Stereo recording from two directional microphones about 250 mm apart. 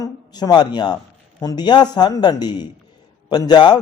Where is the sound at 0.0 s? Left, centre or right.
Centre.